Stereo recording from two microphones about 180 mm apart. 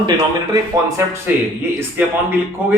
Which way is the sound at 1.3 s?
10° right (ahead or behind).